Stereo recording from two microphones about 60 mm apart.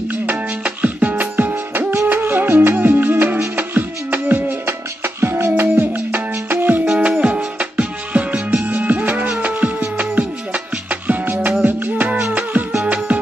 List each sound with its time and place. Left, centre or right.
0.3 s music: right
6.9 s music: centre